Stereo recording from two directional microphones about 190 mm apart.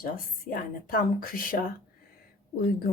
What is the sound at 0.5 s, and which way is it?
Speech, 50° left (ahead or behind).